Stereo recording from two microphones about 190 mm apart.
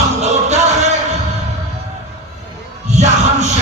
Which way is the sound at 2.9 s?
35° right (ahead or behind).